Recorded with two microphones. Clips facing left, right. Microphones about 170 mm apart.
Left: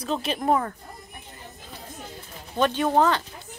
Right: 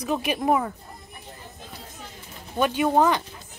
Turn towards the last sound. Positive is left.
turn(degrees=-15)  # may be behind; listen again after turning